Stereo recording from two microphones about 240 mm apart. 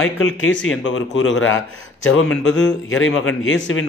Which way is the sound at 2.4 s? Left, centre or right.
Left.